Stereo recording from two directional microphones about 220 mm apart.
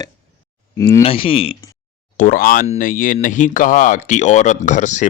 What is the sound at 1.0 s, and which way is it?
Speech, 25° left (ahead or behind).